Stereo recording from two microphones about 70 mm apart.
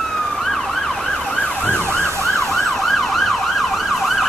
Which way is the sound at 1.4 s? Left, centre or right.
Left.